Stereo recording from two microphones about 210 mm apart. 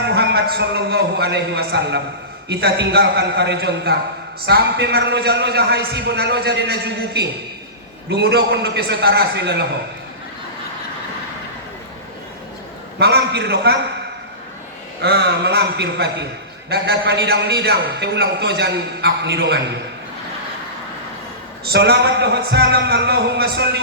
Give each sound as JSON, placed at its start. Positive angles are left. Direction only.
{"t": 0.1, "sound": "a man's voice", "side_deg": -50}
{"t": 13.0, "sound": "a man's voice", "side_deg": -50}
{"t": 15.0, "sound": "a man's voice", "side_deg": -50}
{"t": 21.7, "sound": "a man's voice", "side_deg": -50}